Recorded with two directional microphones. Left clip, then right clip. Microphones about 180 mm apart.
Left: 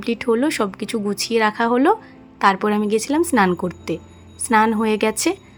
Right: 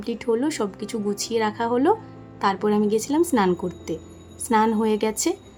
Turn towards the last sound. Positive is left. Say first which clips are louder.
# left 4 dB
turn(degrees=15)  # may be behind; listen again after turning